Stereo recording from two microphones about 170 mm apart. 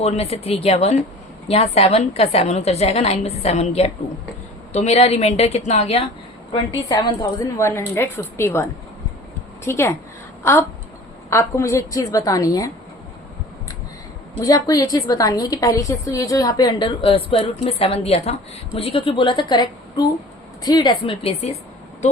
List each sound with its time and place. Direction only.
0.0 s a woman's voice: 35° left (ahead or behind)
6.8 s a woman's voice: 25° left (ahead or behind)
9.6 s a woman's voice: 15° left (ahead or behind)
14.4 s a woman's voice: 20° left (ahead or behind); by 21.6 s 40° left (ahead or behind)